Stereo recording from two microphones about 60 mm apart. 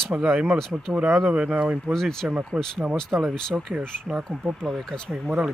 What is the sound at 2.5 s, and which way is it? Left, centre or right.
Speech, centre.